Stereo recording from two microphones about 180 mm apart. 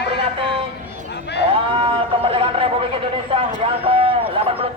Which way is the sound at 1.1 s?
70° left (ahead or behind).